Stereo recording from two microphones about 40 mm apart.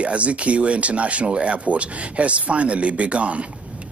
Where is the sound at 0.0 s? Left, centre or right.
Right.